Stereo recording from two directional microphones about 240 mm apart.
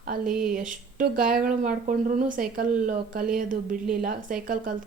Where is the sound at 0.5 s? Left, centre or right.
Right.